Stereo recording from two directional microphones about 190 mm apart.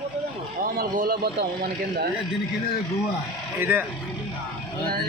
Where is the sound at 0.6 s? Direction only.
45° right (ahead or behind).